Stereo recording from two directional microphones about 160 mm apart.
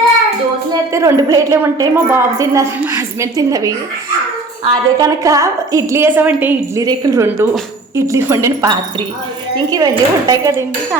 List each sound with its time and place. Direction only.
0.9 s a woman's voice: 20° right (ahead or behind)
4.7 s a woman's voice: 20° right (ahead or behind)
6.8 s a woman's voice: 20° right (ahead or behind)